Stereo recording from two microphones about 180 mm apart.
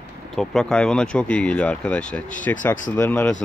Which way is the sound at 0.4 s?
5° left (ahead or behind).